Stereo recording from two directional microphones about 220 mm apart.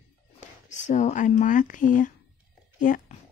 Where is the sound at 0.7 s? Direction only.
35° left (ahead or behind).